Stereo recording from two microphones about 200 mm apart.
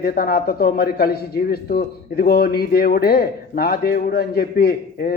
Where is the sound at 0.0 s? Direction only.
50° left (ahead or behind).